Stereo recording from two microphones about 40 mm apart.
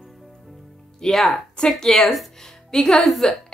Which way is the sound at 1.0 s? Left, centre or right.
Centre.